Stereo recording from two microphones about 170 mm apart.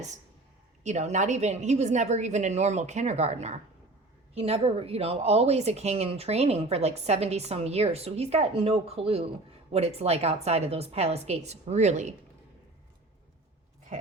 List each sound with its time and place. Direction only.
0.9 s a woman's voice: 45° right (ahead or behind)